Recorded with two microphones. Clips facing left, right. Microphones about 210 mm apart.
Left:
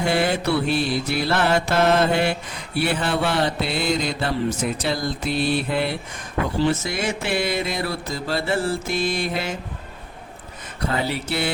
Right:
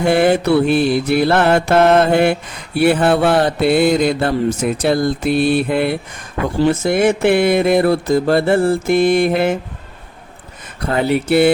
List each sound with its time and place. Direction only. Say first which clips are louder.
0.0 s mantra: right 8 dB; 55° right (ahead or behind)
10.9 s mantra: right 12 dB; 55° right (ahead or behind)